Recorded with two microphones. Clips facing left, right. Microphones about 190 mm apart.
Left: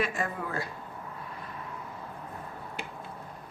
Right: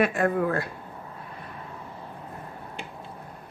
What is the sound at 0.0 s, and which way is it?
Speech, 60° right (ahead or behind).